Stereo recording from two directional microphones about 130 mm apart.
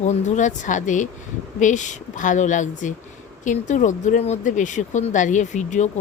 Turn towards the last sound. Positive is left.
turn(degrees=70)  # may be behind; listen again after turning